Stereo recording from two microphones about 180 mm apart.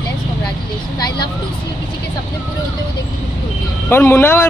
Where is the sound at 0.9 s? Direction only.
25° left (ahead or behind).